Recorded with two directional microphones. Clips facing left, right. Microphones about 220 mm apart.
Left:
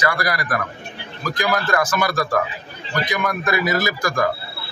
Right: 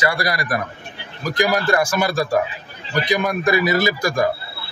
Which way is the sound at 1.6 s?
25° right (ahead or behind).